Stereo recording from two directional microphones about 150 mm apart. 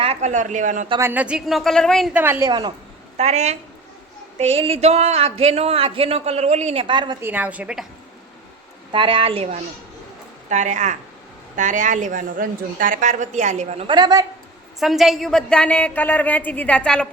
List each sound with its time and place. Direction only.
0.0 s a woman's voice: 45° right (ahead or behind)
1.0 s a woman's voice: 10° right (ahead or behind)
2.1 s a woman's voice: 15° right (ahead or behind)
2.5 s a woman's voice: 30° right (ahead or behind)
3.2 s speech: 45° right (ahead or behind); by 7.2 s 30° right (ahead or behind)
7.2 s a woman's voice: 10° right (ahead or behind)
8.9 s a woman's voice: 35° right (ahead or behind)
10.5 s a woman's voice: 55° right (ahead or behind)
13.8 s a woman's voice: 30° right (ahead or behind)
14.8 s a woman's voice: centre (ahead or behind)